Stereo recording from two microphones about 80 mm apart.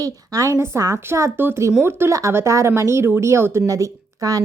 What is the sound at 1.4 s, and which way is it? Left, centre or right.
A woman's voice, right.